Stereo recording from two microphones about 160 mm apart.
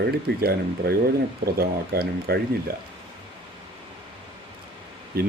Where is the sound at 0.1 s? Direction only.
75° right (ahead or behind).